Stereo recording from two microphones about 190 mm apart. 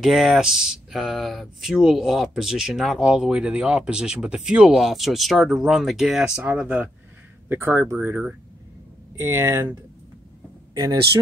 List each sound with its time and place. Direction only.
0.0 s speech: centre (ahead or behind); by 11.0 s 20° right (ahead or behind)